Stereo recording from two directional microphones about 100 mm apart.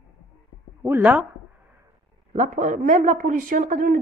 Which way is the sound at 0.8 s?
20° right (ahead or behind).